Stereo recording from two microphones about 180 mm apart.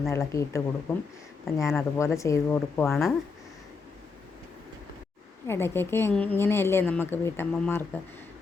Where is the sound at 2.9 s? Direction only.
Centre (ahead or behind).